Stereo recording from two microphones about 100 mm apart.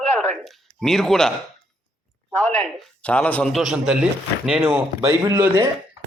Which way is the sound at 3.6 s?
10° right (ahead or behind).